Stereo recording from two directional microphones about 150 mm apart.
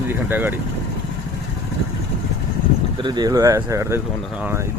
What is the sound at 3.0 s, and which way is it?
Speech, 30° right (ahead or behind).